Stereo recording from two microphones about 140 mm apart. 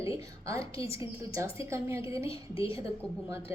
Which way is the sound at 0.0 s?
20° right (ahead or behind).